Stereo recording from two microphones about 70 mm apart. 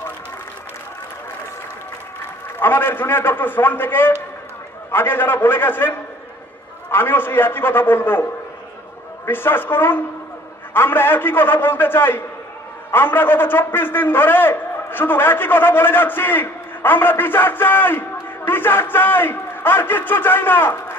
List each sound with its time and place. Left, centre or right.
2.6 s a man's voice: left